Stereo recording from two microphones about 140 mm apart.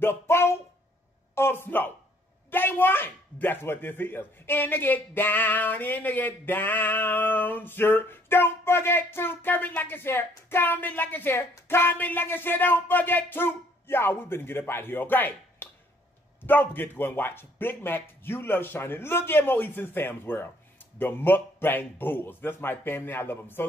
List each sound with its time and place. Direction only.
0.0 s speech: 15° left (ahead or behind)